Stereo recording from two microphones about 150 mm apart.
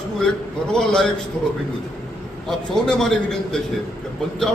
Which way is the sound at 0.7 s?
5° left (ahead or behind).